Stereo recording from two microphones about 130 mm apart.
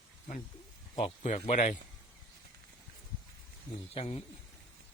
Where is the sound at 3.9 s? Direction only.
50° left (ahead or behind).